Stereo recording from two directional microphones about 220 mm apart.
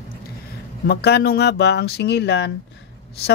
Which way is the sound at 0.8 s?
45° left (ahead or behind).